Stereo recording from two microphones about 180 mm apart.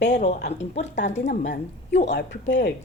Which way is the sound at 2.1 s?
80° left.